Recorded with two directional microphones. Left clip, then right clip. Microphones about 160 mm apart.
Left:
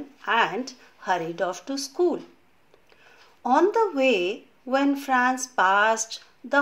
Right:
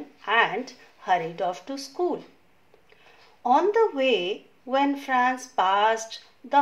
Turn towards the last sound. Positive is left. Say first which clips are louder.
# left 1 dB
turn(degrees=30)  # may be behind; listen again after turning